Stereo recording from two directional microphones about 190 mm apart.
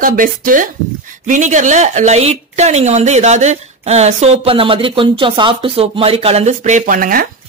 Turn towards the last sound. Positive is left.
turn(degrees=-45)  # may be behind; listen again after turning